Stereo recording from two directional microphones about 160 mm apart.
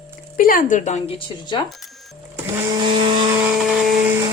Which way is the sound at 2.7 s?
30° right (ahead or behind).